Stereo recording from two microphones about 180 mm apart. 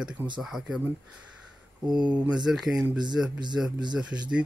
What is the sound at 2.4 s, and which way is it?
A man's voice, centre (ahead or behind).